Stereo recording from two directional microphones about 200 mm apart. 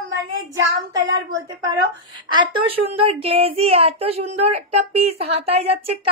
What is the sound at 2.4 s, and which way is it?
A woman's voice, 30° right (ahead or behind).